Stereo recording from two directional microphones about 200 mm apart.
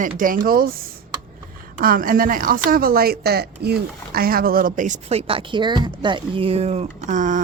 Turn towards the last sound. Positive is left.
turn(degrees=-40)  # may be behind; listen again after turning